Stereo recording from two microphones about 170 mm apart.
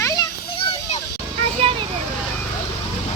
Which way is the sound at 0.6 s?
35° left (ahead or behind).